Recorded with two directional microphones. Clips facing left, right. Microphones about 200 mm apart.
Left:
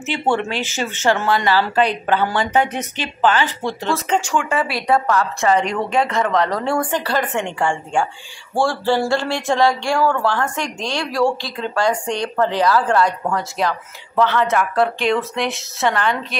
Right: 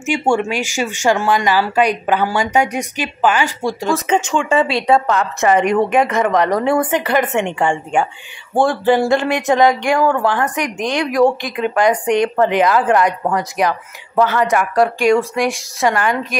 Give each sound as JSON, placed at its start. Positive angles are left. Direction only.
{"t": 0.0, "sound": "speech", "side_deg": -15}
{"t": 5.6, "sound": "a woman's voice", "side_deg": -50}
{"t": 5.9, "sound": "speech", "side_deg": -20}